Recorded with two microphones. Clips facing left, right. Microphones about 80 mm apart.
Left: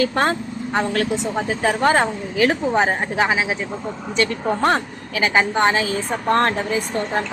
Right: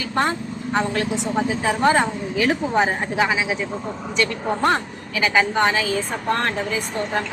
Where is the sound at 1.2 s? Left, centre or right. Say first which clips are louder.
Left 1 dB; left.